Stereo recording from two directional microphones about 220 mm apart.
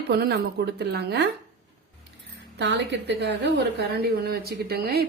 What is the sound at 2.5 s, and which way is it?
A woman's voice, 50° right (ahead or behind).